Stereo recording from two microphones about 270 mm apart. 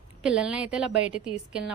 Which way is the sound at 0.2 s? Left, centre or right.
Centre.